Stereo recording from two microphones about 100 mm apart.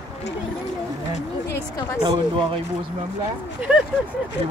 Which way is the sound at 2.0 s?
60° right (ahead or behind).